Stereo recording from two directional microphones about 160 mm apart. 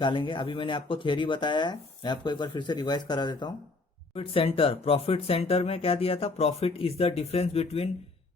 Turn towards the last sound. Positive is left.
turn(degrees=40)  # may be behind; listen again after turning